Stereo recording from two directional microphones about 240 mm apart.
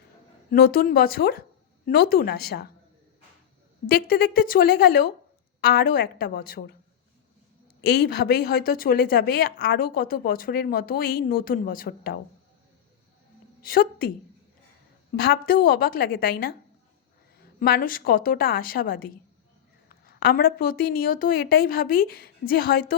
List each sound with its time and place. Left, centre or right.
0.5 s a woman's voice: left
4.0 s a woman's voice: left
7.9 s a woman's voice: left
13.6 s a woman's voice: left
15.1 s a woman's voice: left
17.6 s a woman's voice: left